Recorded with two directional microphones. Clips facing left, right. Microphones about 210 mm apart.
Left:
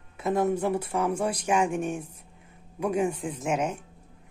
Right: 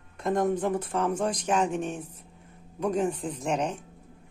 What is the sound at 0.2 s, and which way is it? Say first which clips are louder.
Speech: even; 5° left (ahead or behind).